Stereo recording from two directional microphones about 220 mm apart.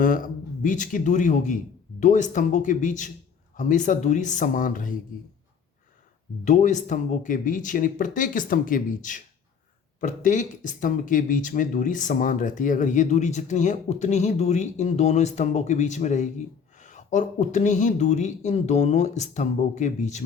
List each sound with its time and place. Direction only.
0.0 s speech: 40° left (ahead or behind)
6.4 s speech: 35° left (ahead or behind)